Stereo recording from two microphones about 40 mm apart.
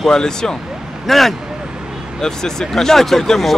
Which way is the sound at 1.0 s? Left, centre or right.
Centre.